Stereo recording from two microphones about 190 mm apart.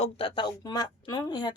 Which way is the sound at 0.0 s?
30° left (ahead or behind).